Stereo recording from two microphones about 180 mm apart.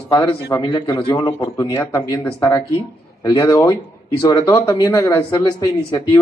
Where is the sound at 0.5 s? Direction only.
20° left (ahead or behind).